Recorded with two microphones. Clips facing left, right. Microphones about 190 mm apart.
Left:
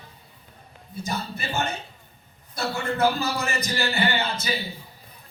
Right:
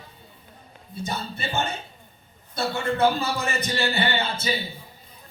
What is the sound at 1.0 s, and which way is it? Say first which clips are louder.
A man's voice: even; 25° right (ahead or behind).